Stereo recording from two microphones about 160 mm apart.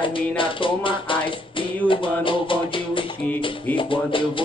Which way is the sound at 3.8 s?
30° left (ahead or behind).